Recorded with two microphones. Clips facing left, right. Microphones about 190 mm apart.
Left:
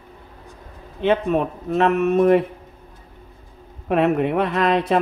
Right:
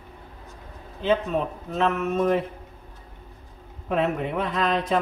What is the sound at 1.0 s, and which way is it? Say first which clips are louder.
A man's voice: left 4 dB; 65° left (ahead or behind).